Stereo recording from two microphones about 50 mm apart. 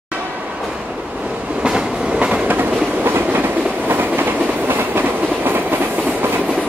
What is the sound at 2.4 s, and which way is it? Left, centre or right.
Train, right.